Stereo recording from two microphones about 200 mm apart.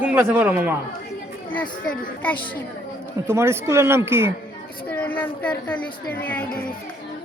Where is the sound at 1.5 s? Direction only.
5° left (ahead or behind).